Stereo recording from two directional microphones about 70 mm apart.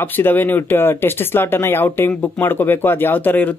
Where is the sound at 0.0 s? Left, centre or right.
Left.